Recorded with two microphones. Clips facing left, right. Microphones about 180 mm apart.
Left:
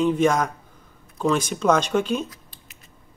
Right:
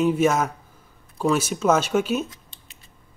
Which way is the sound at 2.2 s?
25° right (ahead or behind).